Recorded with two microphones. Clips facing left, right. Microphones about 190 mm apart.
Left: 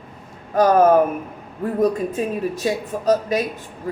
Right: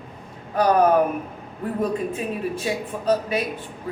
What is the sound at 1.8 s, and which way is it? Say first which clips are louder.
Speech: left 5 dB; 40° left (ahead or behind).